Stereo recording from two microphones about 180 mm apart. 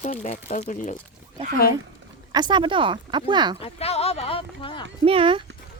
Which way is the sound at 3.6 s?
35° left (ahead or behind).